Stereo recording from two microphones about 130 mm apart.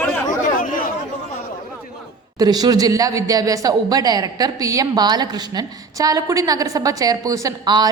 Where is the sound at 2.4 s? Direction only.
30° right (ahead or behind).